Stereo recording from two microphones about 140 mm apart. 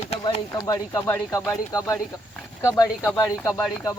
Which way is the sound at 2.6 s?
20° left (ahead or behind).